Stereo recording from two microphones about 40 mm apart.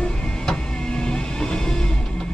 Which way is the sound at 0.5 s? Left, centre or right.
Centre.